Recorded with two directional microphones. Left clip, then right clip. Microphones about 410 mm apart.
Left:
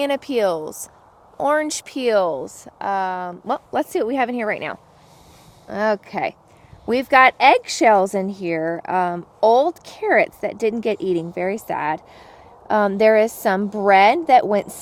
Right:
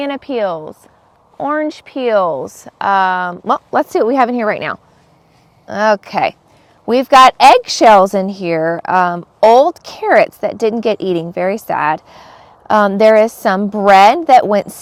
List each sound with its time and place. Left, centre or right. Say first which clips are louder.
0.0 s speech: right 2 dB; centre; by 4.8 s right
5.6 s speech: right 8 dB; centre